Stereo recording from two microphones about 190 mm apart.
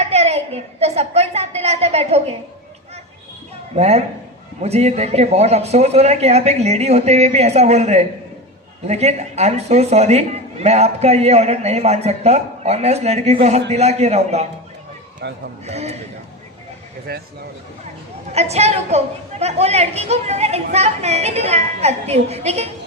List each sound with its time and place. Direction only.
0.0 s a sound: 35° right (ahead or behind)
3.8 s a man's voice: 35° right (ahead or behind)
15.2 s a man's voice: 65° right (ahead or behind)
15.6 s a man's voice: 35° right (ahead or behind)
17.1 s a man's voice: 55° right (ahead or behind)
18.3 s a man's voice: 35° right (ahead or behind)